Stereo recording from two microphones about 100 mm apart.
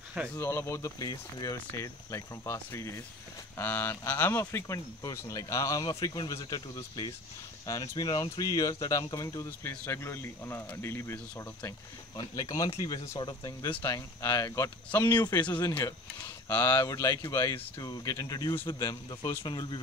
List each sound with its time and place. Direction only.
0.4 s speech: 25° left (ahead or behind)
5.9 s speech: 40° left (ahead or behind)
13.2 s speech: 45° left (ahead or behind)
16.5 s speech: 40° left (ahead or behind)